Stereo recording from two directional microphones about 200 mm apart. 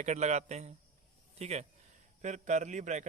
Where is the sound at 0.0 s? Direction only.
35° right (ahead or behind).